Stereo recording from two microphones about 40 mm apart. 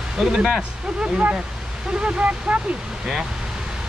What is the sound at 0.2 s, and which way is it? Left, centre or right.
Speech, centre.